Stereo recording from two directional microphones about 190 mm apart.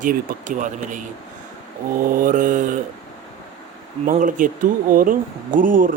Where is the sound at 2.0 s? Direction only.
45° right (ahead or behind).